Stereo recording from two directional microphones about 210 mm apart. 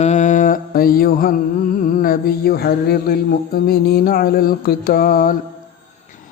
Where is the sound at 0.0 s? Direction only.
35° left (ahead or behind).